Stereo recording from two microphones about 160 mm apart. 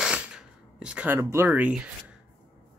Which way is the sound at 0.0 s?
5° right (ahead or behind).